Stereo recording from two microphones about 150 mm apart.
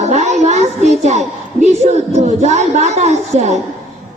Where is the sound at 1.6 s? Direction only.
45° right (ahead or behind).